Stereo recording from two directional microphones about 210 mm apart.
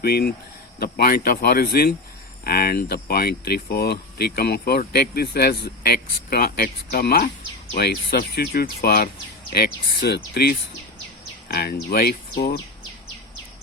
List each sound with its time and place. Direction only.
0.0 s speech: 50° left (ahead or behind)